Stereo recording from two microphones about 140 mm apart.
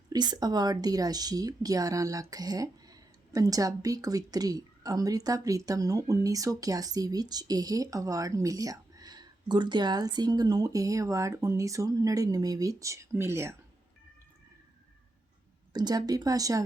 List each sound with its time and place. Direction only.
0.1 s a woman's voice: 30° right (ahead or behind)
15.7 s a woman's voice: 30° right (ahead or behind)